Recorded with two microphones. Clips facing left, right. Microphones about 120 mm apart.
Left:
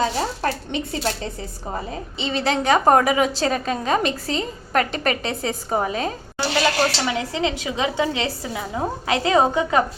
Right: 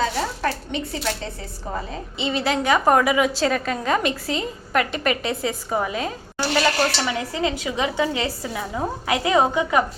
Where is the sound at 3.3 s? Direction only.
25° left (ahead or behind).